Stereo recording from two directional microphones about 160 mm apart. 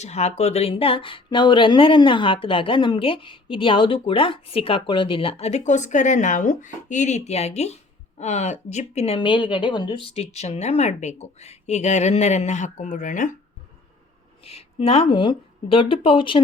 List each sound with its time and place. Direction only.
0.0 s speech: 45° left (ahead or behind)
14.4 s speech: 35° left (ahead or behind)